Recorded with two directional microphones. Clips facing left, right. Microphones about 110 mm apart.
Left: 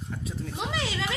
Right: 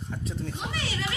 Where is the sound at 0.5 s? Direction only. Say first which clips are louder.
Left 3 dB; 90° left.